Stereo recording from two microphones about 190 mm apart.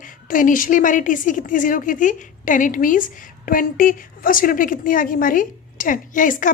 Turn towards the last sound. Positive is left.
turn(degrees=45)  # may be behind; listen again after turning